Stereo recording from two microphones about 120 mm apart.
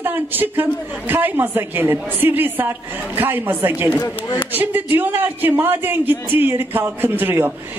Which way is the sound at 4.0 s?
30° left (ahead or behind).